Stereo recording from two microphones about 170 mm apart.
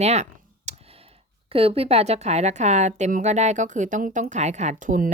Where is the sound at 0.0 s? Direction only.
40° right (ahead or behind).